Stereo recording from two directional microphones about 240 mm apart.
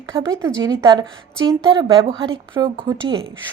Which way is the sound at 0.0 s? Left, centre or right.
Centre.